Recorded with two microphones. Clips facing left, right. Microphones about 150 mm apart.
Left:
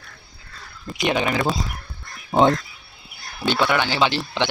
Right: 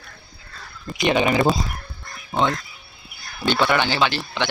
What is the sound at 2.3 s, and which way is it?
Duck, 40° left (ahead or behind).